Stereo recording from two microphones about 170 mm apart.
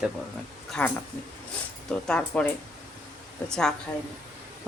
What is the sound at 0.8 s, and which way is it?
Speech, 10° left (ahead or behind).